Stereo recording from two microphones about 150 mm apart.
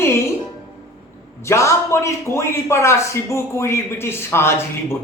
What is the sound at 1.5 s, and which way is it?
A man's voice, 20° left (ahead or behind).